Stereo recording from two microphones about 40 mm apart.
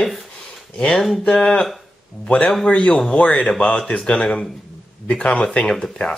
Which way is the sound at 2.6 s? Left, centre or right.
Left.